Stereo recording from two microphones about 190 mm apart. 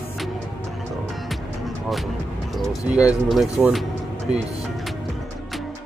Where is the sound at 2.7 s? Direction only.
5° right (ahead or behind).